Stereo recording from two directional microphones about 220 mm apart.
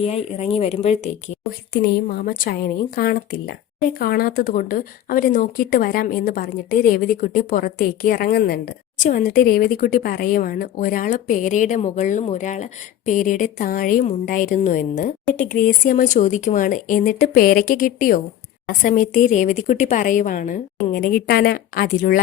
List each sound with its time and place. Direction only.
0.0 s speech: 30° left (ahead or behind)
2.2 s speech: 40° left (ahead or behind)